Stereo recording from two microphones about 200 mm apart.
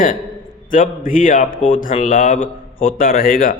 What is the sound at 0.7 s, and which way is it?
A man's voice, 40° left (ahead or behind).